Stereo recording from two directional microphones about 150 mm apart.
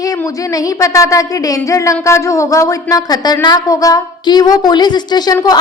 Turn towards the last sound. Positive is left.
turn(degrees=30)  # may be behind; listen again after turning